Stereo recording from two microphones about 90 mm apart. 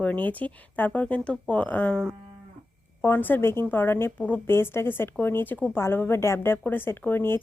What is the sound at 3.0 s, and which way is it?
Speech, 20° left (ahead or behind).